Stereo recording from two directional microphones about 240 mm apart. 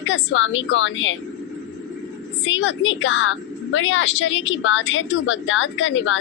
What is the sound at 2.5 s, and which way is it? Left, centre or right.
A woman's voice, left.